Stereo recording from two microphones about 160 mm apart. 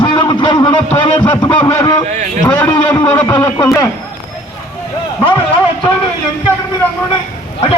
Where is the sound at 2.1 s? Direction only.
50° right (ahead or behind).